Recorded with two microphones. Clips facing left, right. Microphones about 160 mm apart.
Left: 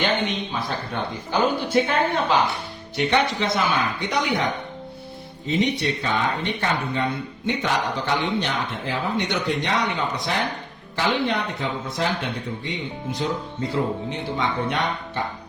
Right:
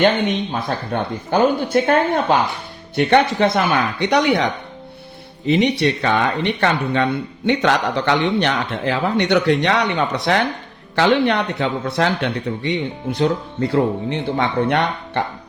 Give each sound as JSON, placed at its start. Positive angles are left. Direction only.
{"t": 0.5, "sound": "speech", "side_deg": -50}
{"t": 5.5, "sound": "speech", "side_deg": -70}